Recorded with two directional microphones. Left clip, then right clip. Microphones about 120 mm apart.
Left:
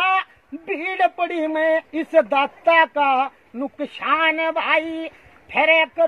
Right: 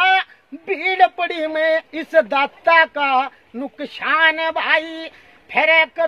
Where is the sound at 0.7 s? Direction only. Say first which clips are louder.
Right 5 dB; 35° right (ahead or behind).